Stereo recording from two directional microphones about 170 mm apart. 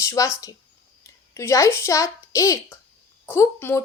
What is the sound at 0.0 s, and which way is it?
A woman's voice, 15° left (ahead or behind).